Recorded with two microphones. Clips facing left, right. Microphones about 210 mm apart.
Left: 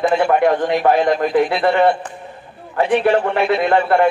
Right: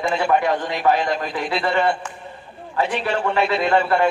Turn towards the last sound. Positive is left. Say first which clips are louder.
# left 3 dB
turn(degrees=55)  # may be behind; listen again after turning